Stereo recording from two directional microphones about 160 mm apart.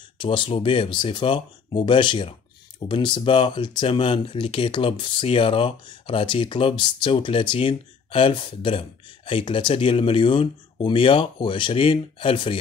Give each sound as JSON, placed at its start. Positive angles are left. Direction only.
{"t": 0.2, "sound": "speech", "side_deg": 30}